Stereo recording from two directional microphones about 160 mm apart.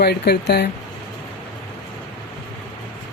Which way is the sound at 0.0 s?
90° left.